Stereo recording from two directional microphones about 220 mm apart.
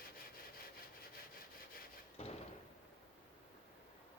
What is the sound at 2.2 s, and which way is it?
Slam, 25° left (ahead or behind).